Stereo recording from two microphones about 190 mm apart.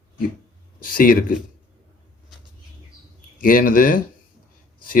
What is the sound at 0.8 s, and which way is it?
Speech, 50° left (ahead or behind).